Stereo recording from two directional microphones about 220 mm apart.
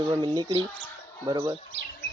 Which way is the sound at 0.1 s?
15° right (ahead or behind).